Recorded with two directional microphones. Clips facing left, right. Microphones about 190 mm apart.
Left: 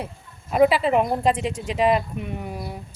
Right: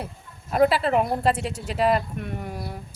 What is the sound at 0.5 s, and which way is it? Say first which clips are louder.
Speech: left 2 dB; 5° left (ahead or behind).